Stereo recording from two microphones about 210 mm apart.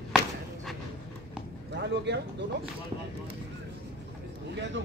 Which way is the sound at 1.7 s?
55° right (ahead or behind).